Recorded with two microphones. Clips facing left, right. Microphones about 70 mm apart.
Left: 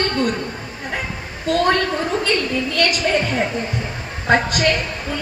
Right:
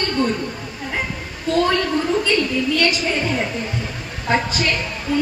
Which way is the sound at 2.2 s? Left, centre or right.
Left.